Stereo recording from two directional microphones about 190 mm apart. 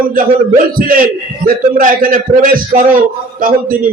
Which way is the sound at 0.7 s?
50° right (ahead or behind).